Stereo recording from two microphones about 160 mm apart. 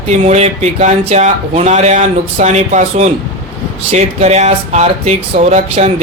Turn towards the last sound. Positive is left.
turn(degrees=-40)  # may be behind; listen again after turning